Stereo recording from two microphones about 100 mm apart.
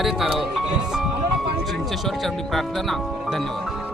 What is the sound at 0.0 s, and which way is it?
Speech, 5° right (ahead or behind).